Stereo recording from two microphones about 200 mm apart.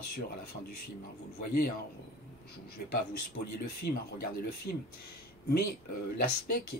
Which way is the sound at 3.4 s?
40° left (ahead or behind).